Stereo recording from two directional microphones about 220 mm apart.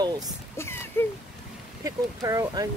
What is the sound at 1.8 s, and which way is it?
Speech, 15° right (ahead or behind).